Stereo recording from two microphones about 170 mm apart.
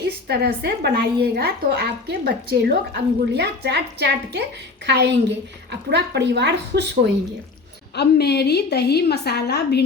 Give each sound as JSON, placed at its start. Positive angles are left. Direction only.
{"t": 0.0, "sound": "a woman's voice", "side_deg": -70}
{"t": 4.9, "sound": "a woman's voice", "side_deg": -90}
{"t": 7.9, "sound": "a woman's voice", "side_deg": 75}